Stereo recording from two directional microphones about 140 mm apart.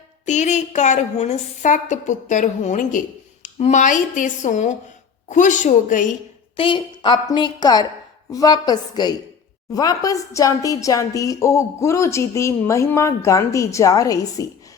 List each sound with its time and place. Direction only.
0.3 s a woman's voice: 60° left (ahead or behind)
6.6 s a woman's voice: 35° left (ahead or behind)